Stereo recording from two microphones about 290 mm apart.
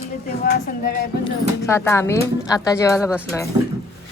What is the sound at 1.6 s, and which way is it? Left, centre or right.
A woman's voice, centre.